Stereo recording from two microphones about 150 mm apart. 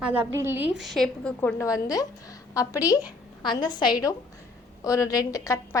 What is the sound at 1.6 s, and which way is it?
A woman's voice, 20° left (ahead or behind).